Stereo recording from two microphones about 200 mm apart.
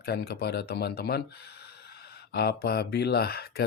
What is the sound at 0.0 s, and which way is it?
Speech, 50° left (ahead or behind).